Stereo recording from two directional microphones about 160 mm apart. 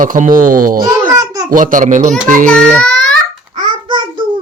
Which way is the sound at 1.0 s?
15° right (ahead or behind).